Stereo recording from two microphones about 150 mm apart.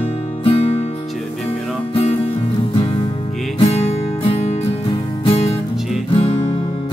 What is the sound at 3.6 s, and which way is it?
Music, 40° left (ahead or behind).